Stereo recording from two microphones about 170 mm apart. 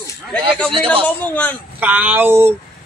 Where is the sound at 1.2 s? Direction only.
10° left (ahead or behind).